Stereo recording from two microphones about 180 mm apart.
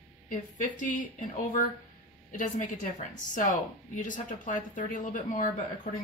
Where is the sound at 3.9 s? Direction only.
45° left (ahead or behind).